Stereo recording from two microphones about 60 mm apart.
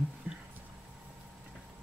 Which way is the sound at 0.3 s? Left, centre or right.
Right.